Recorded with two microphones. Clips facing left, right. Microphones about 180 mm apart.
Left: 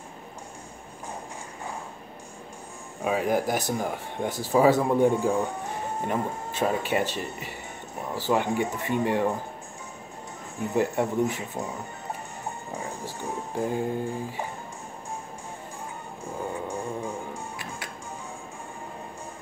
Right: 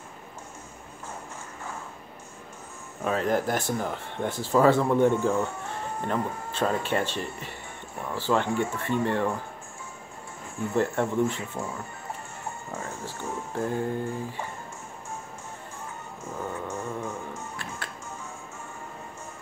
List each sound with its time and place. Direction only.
3.0 s speech: 10° left (ahead or behind)
8.3 s speech: 15° left (ahead or behind)
10.6 s speech: 20° left (ahead or behind)
16.3 s music: 15° left (ahead or behind)